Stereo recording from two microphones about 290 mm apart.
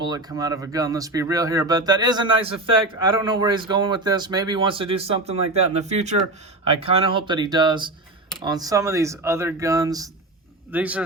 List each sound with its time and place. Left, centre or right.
0.0 s speech: centre